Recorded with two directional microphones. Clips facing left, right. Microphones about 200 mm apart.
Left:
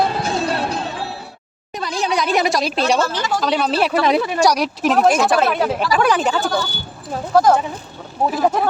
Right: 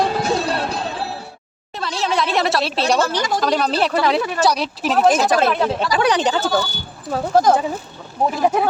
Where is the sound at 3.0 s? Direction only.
15° right (ahead or behind).